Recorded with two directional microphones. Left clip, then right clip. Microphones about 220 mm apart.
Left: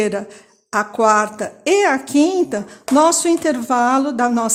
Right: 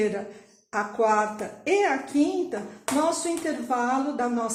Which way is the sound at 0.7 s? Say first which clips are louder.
Left 8 dB; 45° left (ahead or behind).